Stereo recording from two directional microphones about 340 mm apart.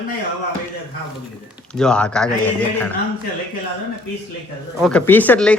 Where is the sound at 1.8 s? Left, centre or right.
Centre.